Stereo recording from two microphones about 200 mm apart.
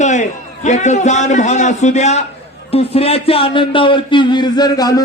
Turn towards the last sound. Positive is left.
turn(degrees=20)  # may be behind; listen again after turning